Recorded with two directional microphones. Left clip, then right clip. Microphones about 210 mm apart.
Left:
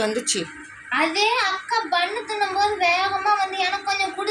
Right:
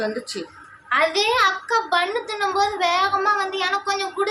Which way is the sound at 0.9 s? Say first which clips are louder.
Right 1 dB; 35° right (ahead or behind).